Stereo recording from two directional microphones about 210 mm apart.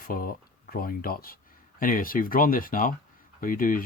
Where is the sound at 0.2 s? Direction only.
45° left (ahead or behind).